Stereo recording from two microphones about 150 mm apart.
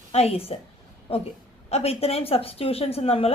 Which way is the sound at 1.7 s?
40° left (ahead or behind).